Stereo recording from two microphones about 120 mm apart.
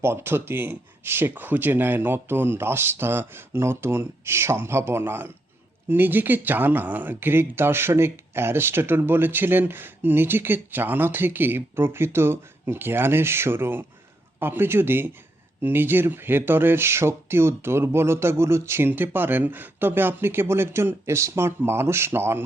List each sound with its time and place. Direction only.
0.0 s speech: 20° right (ahead or behind)